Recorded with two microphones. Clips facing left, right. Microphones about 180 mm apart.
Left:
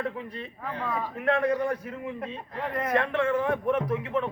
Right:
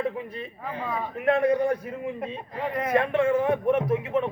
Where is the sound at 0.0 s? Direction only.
10° right (ahead or behind); by 1.7 s 25° right (ahead or behind).